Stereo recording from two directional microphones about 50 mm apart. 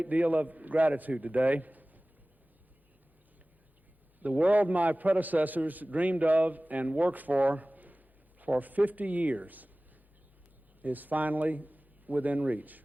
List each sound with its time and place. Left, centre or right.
0.0 s a man's voice: right
4.2 s a man's voice: right
10.8 s speech: right